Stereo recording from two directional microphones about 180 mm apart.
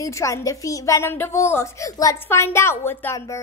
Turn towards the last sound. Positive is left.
turn(degrees=15)  # may be behind; listen again after turning